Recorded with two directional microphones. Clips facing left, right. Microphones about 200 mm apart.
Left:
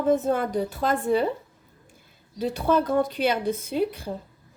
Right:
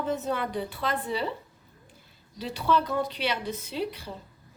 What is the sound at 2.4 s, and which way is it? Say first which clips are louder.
A woman's voice: left 4 dB; 50° left (ahead or behind).